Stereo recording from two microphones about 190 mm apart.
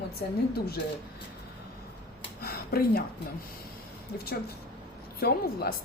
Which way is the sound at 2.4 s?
55° left (ahead or behind).